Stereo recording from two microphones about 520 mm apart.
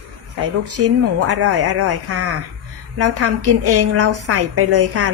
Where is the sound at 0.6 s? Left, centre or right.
Right.